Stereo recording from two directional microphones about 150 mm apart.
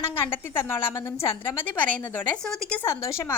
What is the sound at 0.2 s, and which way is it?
Speech, 15° left (ahead or behind).